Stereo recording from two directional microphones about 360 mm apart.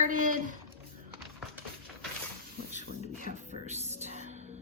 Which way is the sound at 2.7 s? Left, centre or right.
Centre.